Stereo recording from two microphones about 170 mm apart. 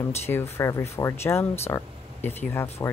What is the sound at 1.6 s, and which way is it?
Air conditioning, 15° left (ahead or behind).